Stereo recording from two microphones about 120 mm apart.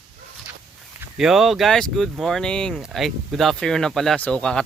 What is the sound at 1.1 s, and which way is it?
Speech, 5° right (ahead or behind).